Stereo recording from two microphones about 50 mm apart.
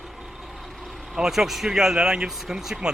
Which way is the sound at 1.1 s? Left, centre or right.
Centre.